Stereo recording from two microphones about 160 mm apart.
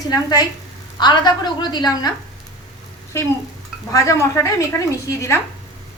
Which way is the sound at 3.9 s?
20° left (ahead or behind).